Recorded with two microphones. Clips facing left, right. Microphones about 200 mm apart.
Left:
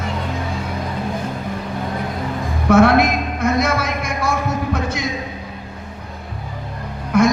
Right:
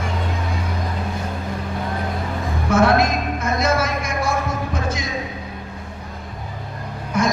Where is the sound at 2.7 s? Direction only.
60° left (ahead or behind).